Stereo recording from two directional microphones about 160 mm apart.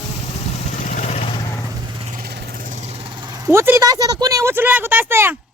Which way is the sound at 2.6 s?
45° right (ahead or behind).